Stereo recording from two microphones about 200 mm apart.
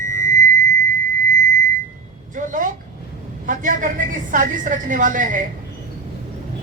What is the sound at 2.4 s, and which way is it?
Speech, 40° right (ahead or behind).